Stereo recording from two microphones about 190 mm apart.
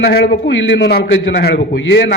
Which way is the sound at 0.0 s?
55° left (ahead or behind).